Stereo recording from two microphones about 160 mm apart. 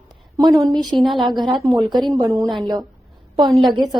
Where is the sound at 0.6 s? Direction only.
25° right (ahead or behind).